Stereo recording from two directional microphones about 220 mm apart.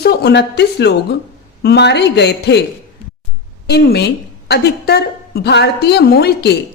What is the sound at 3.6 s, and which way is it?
A woman's voice, 45° left (ahead or behind).